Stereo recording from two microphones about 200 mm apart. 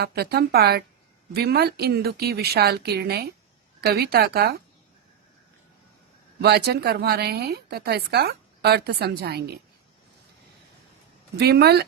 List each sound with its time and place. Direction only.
0.0 s speech: 50° right (ahead or behind)
6.4 s speech: 55° right (ahead or behind)
11.3 s speech: 55° right (ahead or behind)